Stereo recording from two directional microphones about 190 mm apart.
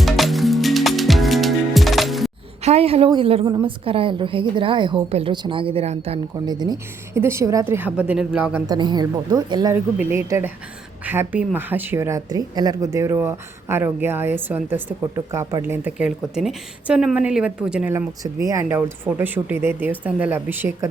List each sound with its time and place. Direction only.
0.0 s music: centre (ahead or behind)
2.6 s a woman's voice: 30° right (ahead or behind)
6.4 s a woman's voice: 20° right (ahead or behind)
8.6 s a woman's voice: 20° right (ahead or behind)